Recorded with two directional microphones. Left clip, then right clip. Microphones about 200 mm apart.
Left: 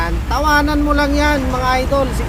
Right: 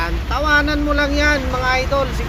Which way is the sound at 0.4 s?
20° left (ahead or behind).